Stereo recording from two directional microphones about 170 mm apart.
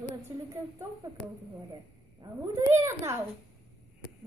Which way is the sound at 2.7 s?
15° right (ahead or behind).